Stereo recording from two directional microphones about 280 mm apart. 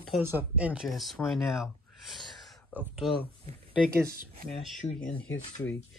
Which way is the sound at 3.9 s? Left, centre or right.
Right.